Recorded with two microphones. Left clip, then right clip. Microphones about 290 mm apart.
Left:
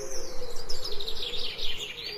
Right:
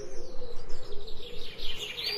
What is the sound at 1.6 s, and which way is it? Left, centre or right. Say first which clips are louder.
Chirp: even; centre.